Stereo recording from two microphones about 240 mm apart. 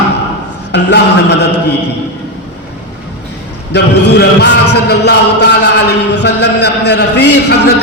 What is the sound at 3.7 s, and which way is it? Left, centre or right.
Chant, left.